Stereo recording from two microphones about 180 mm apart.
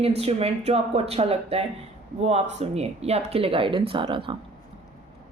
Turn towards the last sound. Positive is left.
turn(degrees=-30)  # may be behind; listen again after turning